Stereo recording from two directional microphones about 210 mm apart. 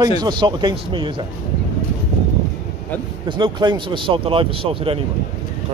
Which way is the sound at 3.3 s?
20° right (ahead or behind).